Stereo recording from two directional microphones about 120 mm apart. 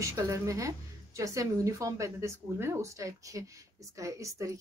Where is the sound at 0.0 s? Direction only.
25° right (ahead or behind).